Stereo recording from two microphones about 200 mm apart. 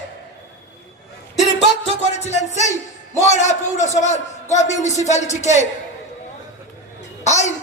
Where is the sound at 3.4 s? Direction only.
35° left (ahead or behind).